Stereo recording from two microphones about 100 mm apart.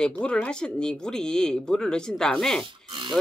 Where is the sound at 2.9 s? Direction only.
50° right (ahead or behind).